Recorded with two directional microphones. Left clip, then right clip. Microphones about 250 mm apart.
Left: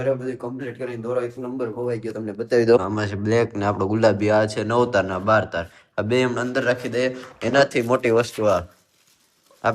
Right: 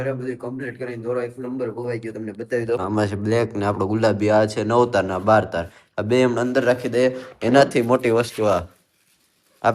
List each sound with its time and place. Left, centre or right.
0.6 s speech: centre
2.6 s speech: left
2.8 s speech: centre
9.6 s speech: centre